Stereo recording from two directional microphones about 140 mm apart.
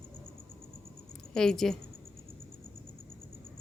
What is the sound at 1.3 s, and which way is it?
Speech, 5° left (ahead or behind).